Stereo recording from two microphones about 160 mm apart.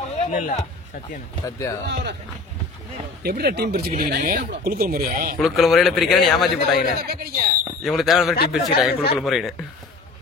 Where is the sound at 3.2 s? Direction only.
80° right.